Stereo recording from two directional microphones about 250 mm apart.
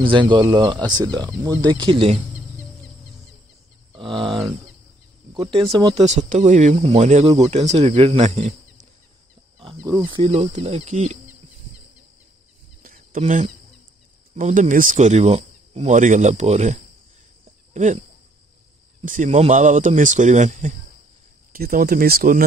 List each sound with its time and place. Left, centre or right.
0.0 s speech: centre
3.9 s a sound: centre
5.3 s speech: centre
6.0 s speech: right
9.6 s wild animals: right
10.0 s speech: right
12.8 s a sound: right
14.3 s speech: right